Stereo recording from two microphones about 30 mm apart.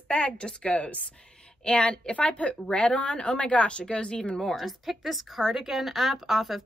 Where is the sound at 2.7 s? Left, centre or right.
Left.